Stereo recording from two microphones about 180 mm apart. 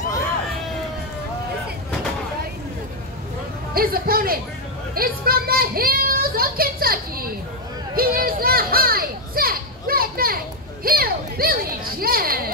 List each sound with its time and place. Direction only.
3.7 s a sound: 55° right (ahead or behind)
4.9 s speech: 55° right (ahead or behind)
7.9 s children playing: 55° right (ahead or behind)